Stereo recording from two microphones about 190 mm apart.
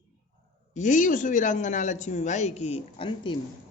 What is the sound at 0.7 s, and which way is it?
A man's voice, 40° left (ahead or behind).